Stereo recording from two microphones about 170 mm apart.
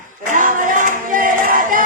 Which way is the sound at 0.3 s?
50° right (ahead or behind).